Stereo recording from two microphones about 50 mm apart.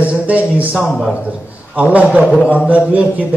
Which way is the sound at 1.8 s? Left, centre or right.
Right.